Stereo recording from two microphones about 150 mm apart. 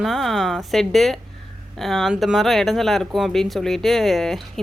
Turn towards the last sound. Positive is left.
turn(degrees=0)  # may be behind; listen again after turning